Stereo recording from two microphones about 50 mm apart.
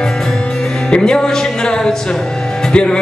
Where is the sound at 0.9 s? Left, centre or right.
Centre.